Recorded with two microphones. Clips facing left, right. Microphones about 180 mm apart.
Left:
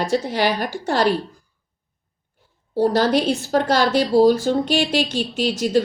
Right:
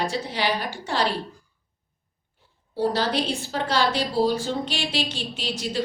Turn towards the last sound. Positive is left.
turn(degrees=45)  # may be behind; listen again after turning